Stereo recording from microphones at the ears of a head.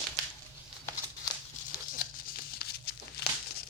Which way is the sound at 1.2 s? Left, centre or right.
Left.